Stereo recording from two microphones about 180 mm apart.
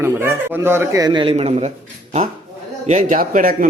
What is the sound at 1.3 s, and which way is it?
Speech, 35° right (ahead or behind).